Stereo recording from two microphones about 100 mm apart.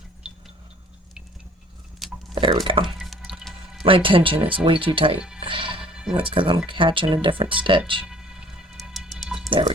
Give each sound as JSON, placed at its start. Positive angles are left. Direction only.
{"t": 0.2, "sound": "a sound", "side_deg": -10}
{"t": 2.3, "sound": "a sound", "side_deg": -55}
{"t": 2.8, "sound": "drip", "side_deg": 0}
{"t": 3.8, "sound": "speech", "side_deg": -60}
{"t": 5.4, "sound": "music", "side_deg": -55}
{"t": 5.8, "sound": "music", "side_deg": -10}
{"t": 6.3, "sound": "speech", "side_deg": -60}
{"t": 8.0, "sound": "music", "side_deg": -10}
{"t": 9.5, "sound": "speech", "side_deg": -55}